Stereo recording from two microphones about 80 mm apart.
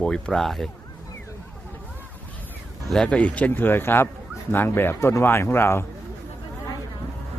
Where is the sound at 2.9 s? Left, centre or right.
Centre; by 5.9 s left.